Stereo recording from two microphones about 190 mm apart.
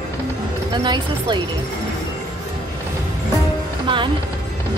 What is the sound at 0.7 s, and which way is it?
Speech, 25° right (ahead or behind).